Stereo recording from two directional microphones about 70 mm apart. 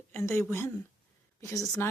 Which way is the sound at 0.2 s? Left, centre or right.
Left.